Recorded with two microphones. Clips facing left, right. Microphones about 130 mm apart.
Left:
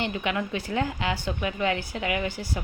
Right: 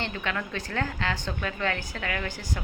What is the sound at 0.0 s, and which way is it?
A woman's voice, 15° left (ahead or behind).